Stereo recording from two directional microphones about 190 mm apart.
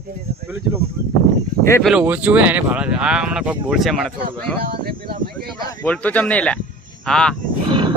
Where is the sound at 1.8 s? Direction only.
5° right (ahead or behind).